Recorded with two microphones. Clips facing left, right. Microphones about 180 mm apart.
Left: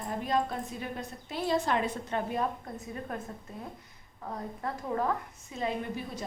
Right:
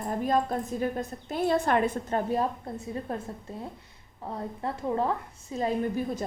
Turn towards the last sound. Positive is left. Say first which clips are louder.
# right 6 dB
turn(degrees=-40)  # may be behind; listen again after turning